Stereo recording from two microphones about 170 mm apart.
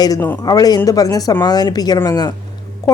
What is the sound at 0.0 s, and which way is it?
A woman's voice, 20° left (ahead or behind).